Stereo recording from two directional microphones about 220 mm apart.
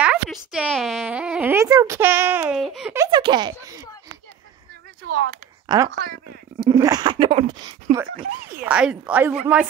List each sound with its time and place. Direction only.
0.0 s speech: 5° right (ahead or behind)
5.0 s speech: 45° right (ahead or behind)
6.6 s speech: 20° right (ahead or behind)
8.6 s speech: 5° right (ahead or behind)